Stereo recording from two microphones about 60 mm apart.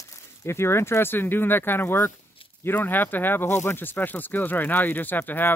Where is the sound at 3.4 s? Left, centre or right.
Left.